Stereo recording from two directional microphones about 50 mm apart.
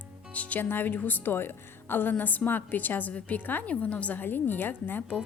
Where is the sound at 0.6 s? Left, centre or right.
Left.